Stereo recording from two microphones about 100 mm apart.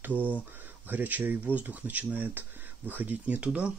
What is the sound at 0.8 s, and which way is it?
Speech, 15° right (ahead or behind).